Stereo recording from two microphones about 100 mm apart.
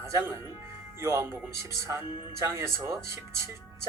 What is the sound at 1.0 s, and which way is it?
Speech, 30° right (ahead or behind).